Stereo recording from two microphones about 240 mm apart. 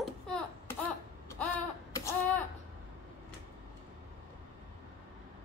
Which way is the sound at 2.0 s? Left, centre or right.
Centre.